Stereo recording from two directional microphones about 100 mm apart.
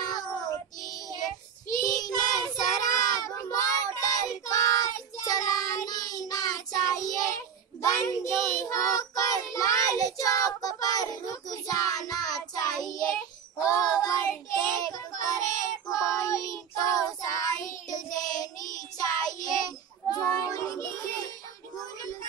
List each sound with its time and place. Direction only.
0.1 s child singing: 40° left (ahead or behind)